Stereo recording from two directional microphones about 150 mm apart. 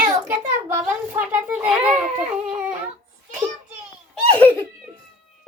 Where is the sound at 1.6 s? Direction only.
5° right (ahead or behind).